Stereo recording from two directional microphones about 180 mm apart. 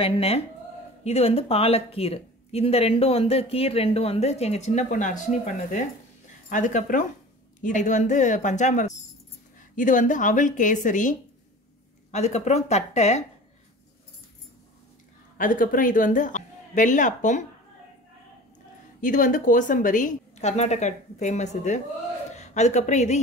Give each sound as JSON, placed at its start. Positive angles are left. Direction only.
{"t": 0.0, "sound": "a woman's voice", "side_deg": 30}
{"t": 15.3, "sound": "a woman's voice", "side_deg": 50}
{"t": 18.9, "sound": "a woman's voice", "side_deg": 45}